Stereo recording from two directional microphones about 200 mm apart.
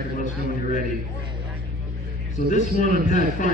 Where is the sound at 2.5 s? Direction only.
40° left (ahead or behind).